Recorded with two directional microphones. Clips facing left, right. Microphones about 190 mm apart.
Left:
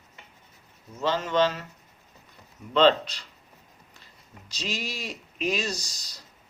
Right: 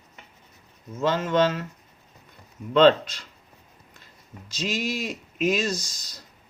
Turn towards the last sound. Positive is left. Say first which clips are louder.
# right 4 dB
turn(degrees=-50)  # may be behind; listen again after turning